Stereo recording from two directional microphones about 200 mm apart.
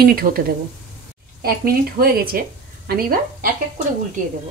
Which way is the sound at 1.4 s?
45° right (ahead or behind).